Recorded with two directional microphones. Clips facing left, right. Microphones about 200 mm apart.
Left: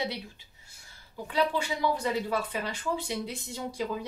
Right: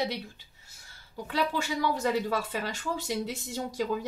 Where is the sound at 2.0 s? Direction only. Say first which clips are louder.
Right 1 dB; 45° right (ahead or behind).